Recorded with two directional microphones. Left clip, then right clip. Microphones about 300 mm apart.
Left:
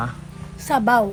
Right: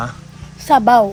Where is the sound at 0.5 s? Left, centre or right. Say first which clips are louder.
Right 7 dB; centre.